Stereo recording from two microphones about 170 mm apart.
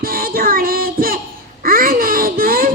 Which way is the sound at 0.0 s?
60° right (ahead or behind).